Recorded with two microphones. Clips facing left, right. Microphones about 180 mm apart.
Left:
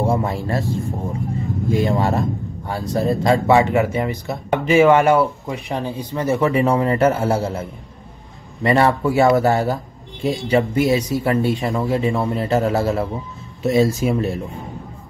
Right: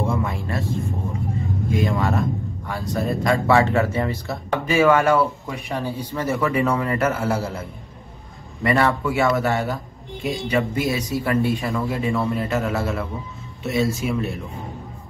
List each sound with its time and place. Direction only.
0.0 s a sound: 35° left (ahead or behind)
1.7 s vehicle: 30° left (ahead or behind)
2.9 s speech: 25° left (ahead or behind)
8.6 s speech: 30° left (ahead or behind)